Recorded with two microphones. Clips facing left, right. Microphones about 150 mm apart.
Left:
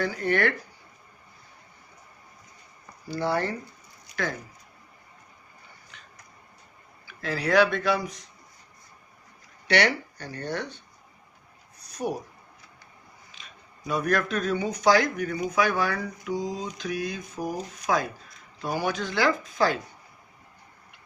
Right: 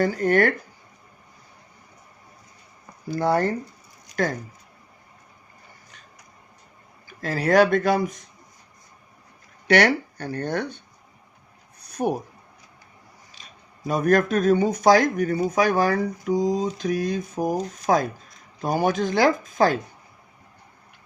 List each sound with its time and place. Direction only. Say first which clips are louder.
0.0 s speech: right 5 dB; 45° right (ahead or behind)
3.1 s speech: right 5 dB; 45° right (ahead or behind)
7.2 s speech: right 4 dB; 45° right (ahead or behind)
9.6 s speech: right 5 dB; 50° right (ahead or behind)
11.9 s a sound: right 6 dB; 55° right (ahead or behind)
13.3 s speech: right 1 dB; 40° right (ahead or behind)